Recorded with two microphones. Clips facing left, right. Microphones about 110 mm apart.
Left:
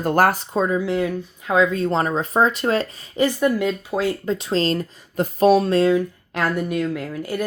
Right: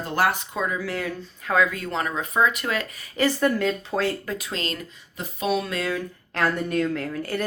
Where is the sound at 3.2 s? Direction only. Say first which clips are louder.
Left 3 dB; 15° left (ahead or behind).